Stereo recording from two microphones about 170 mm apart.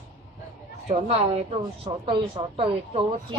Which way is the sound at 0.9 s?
40° right (ahead or behind).